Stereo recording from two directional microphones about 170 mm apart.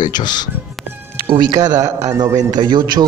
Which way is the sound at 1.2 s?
25° right (ahead or behind).